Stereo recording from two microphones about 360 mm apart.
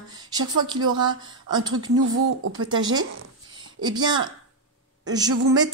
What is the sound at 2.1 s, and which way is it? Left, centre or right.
Speech, right.